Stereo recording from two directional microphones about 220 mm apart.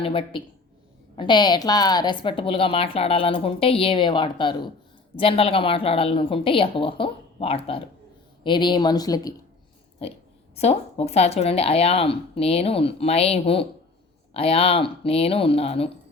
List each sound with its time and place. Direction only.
0.0 s a woman's voice: 25° left (ahead or behind)